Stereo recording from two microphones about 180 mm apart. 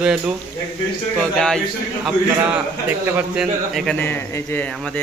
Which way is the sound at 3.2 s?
5° right (ahead or behind).